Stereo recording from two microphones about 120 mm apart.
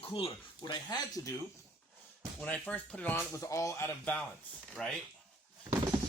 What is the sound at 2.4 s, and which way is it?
Speech, 15° left (ahead or behind).